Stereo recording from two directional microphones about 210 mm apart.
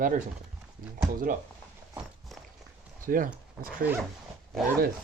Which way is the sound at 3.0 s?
40° right (ahead or behind).